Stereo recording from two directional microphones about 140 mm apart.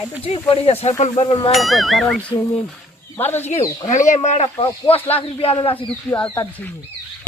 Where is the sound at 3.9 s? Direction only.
60° left (ahead or behind).